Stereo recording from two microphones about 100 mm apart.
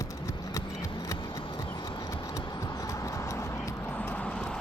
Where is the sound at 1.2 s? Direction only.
50° left (ahead or behind).